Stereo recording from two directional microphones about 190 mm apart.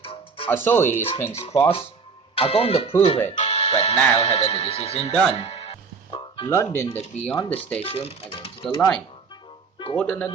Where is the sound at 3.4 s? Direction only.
30° left (ahead or behind).